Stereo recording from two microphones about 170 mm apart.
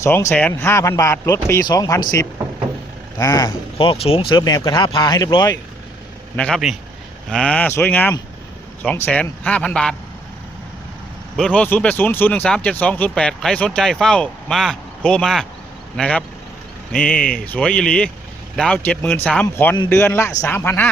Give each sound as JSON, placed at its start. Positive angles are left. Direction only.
{"t": 0.0, "sound": "speech", "side_deg": 15}
{"t": 3.8, "sound": "speech", "side_deg": 35}
{"t": 6.3, "sound": "a man's voice", "side_deg": 5}
{"t": 11.3, "sound": "speech", "side_deg": 5}
{"t": 17.2, "sound": "speech", "side_deg": 55}
{"t": 17.4, "sound": "speech", "side_deg": 10}